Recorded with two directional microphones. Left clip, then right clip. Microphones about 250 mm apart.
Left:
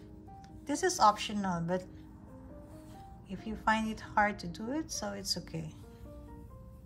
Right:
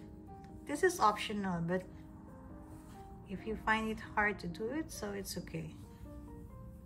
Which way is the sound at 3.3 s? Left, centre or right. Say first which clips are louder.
Left 3 dB; centre.